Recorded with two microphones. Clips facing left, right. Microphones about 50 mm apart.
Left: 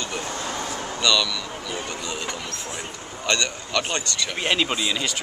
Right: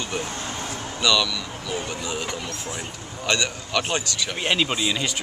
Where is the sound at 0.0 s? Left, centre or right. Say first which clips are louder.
Right 1 dB; centre.